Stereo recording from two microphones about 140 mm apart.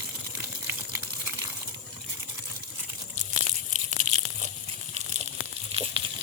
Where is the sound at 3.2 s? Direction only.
55° right (ahead or behind).